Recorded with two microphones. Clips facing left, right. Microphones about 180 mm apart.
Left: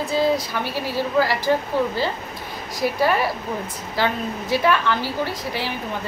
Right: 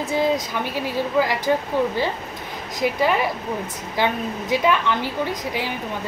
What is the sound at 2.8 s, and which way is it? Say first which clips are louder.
A woman's voice: even; 15° right (ahead or behind).